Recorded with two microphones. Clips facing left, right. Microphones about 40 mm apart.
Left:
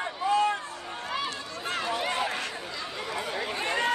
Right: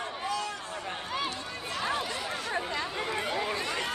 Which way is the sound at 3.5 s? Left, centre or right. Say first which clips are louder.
Left 5 dB; left.